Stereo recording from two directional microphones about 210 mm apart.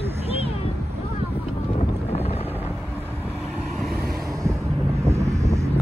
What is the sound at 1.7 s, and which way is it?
Boat, 30° left (ahead or behind).